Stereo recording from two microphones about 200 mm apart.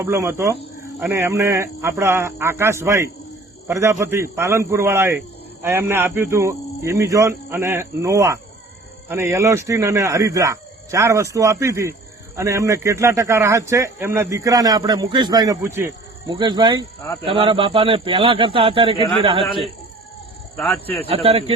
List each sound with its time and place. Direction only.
0.0 s speech: 15° right (ahead or behind)
16.4 s a man's voice: 25° right (ahead or behind)
20.6 s speech: 10° left (ahead or behind)
21.1 s a man's voice: 30° right (ahead or behind)